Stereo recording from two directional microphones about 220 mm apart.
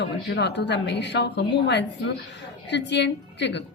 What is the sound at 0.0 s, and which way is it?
Speech, 55° left (ahead or behind).